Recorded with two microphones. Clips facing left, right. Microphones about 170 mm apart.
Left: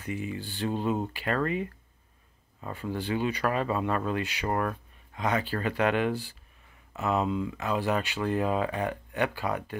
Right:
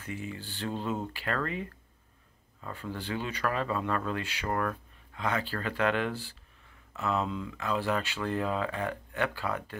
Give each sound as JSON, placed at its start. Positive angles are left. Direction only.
{"t": 0.0, "sound": "speech", "side_deg": 15}